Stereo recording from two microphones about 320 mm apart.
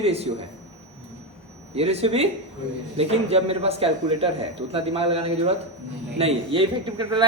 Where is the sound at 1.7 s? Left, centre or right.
Centre.